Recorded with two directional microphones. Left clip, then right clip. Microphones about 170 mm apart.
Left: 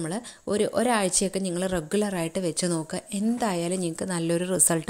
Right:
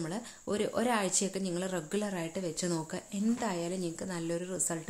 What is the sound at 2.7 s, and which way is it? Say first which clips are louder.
A woman's voice: left 6 dB; 35° left (ahead or behind).